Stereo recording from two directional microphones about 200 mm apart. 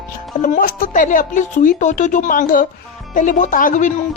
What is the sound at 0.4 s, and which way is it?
Speech, 40° left (ahead or behind).